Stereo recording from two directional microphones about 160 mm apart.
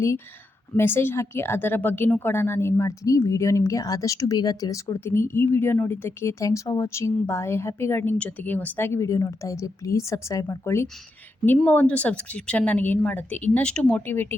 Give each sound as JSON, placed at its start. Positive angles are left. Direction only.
{"t": 0.8, "sound": "a woman's voice", "side_deg": 15}